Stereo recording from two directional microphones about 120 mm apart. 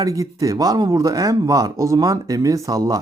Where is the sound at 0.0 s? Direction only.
30° right (ahead or behind).